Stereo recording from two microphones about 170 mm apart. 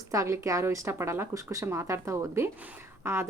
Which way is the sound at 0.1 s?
20° right (ahead or behind).